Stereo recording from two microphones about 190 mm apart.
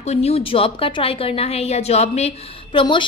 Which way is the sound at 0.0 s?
35° left (ahead or behind).